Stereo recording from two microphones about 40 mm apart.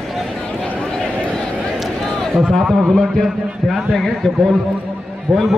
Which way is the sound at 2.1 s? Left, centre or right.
Centre.